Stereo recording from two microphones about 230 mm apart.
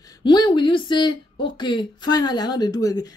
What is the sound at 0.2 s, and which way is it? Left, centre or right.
A woman's voice, centre.